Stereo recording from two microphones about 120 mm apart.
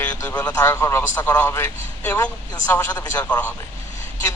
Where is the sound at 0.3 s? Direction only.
10° left (ahead or behind).